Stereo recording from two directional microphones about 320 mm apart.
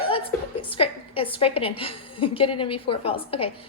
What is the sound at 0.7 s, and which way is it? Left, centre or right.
A woman's voice, centre.